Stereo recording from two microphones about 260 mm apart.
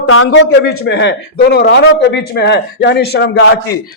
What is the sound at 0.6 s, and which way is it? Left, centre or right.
Speech, left.